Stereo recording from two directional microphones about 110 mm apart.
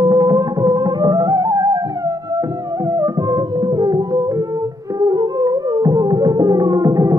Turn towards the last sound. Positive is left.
turn(degrees=-30)  # may be behind; listen again after turning